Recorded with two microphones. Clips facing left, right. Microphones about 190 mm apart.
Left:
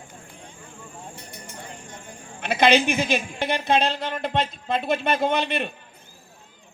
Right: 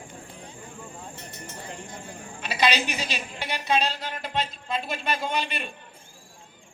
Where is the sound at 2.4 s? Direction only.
55° left (ahead or behind).